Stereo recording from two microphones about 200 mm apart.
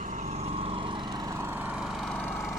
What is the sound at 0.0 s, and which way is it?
Lawn mower, 40° right (ahead or behind).